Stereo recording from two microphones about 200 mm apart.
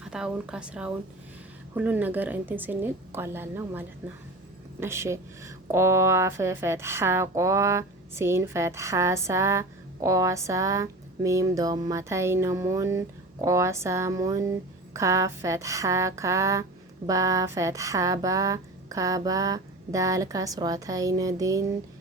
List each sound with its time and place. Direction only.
0.0 s a woman's voice: 5° right (ahead or behind)